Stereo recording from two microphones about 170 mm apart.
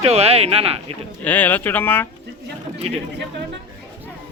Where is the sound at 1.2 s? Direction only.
10° left (ahead or behind).